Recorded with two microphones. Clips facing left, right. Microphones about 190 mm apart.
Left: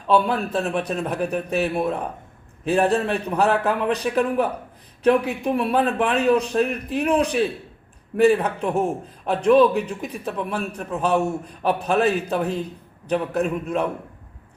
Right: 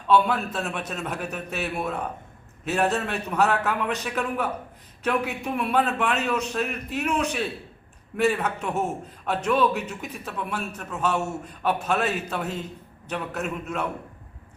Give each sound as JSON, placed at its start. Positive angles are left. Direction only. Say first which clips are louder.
{"t": 0.2, "sound": "a man's voice", "louder": "left 3 dB", "side_deg": 35}